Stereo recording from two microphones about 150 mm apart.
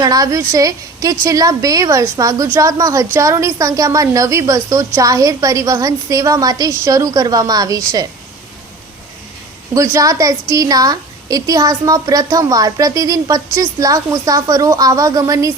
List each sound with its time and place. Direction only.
0.0 s a woman's voice: 25° right (ahead or behind)
9.7 s a woman's voice: 20° right (ahead or behind)